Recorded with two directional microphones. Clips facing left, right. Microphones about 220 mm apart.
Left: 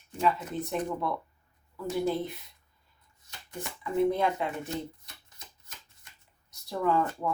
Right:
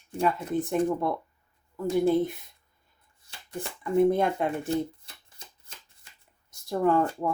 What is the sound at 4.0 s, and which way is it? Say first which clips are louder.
Speech: right 3 dB; 50° right (ahead or behind).